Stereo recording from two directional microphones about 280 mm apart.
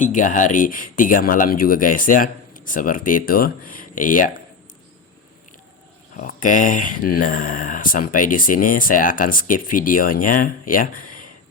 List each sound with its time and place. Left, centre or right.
0.0 s speech: left
6.1 s speech: left